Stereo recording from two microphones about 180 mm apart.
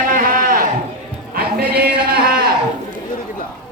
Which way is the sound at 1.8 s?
55° right (ahead or behind).